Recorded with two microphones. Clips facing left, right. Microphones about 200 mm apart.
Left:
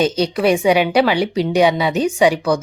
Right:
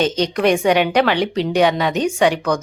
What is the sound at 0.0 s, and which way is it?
A woman's voice, 10° left (ahead or behind).